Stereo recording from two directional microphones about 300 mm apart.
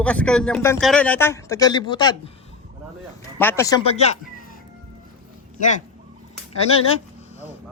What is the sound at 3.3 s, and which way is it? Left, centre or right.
Speech, centre.